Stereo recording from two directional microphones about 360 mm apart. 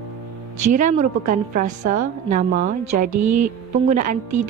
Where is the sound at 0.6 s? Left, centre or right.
Centre.